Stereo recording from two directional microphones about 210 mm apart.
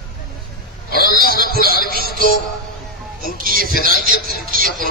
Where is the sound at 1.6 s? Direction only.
45° left (ahead or behind).